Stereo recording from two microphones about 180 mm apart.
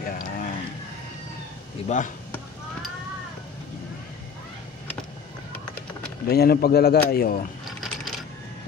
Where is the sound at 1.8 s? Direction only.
45° left (ahead or behind).